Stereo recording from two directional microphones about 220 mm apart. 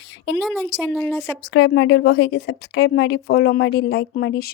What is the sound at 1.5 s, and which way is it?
A woman's voice, 55° left (ahead or behind).